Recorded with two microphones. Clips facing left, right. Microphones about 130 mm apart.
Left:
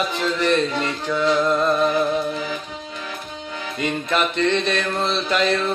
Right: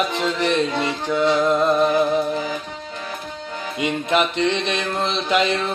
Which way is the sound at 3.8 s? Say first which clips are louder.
Right 2 dB; 15° right (ahead or behind).